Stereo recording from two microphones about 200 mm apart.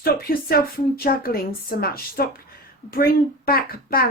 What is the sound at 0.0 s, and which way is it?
A woman's voice, 50° left (ahead or behind).